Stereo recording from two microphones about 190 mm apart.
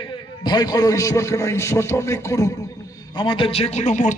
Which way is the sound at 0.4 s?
20° left (ahead or behind).